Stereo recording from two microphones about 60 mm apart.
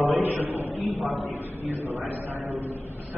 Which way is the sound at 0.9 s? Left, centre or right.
Centre.